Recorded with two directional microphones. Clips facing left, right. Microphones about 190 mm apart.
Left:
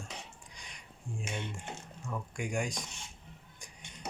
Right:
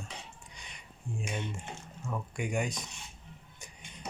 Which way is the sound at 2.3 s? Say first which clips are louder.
Right 2 dB; 5° right (ahead or behind).